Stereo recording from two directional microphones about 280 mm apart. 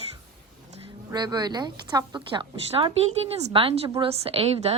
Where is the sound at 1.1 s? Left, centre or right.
Centre.